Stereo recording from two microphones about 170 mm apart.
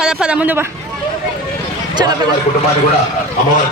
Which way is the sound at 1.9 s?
25° right (ahead or behind).